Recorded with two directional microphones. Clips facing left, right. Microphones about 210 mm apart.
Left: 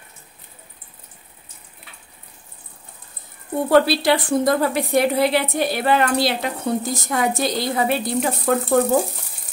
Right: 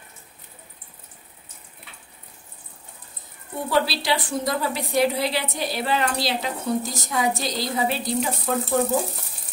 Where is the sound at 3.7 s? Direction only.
55° left (ahead or behind).